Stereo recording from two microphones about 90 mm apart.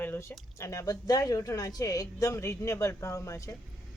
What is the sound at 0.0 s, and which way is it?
Speech, 25° left (ahead or behind).